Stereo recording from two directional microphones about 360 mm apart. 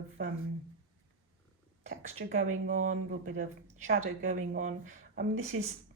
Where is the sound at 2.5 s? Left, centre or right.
Right.